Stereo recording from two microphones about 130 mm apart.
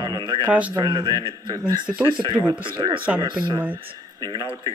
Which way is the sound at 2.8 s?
35° right (ahead or behind).